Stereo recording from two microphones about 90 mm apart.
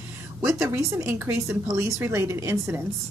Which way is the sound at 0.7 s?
30° right (ahead or behind).